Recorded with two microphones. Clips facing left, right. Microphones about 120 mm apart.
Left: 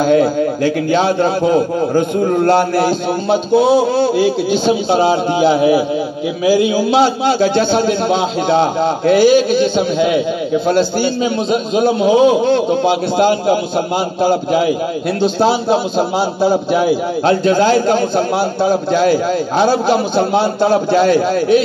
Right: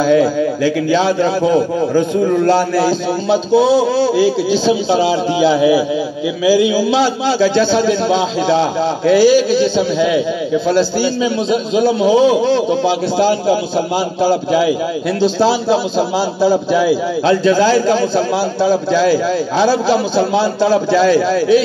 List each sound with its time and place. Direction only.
0.0 s a man's voice: 50° left (ahead or behind)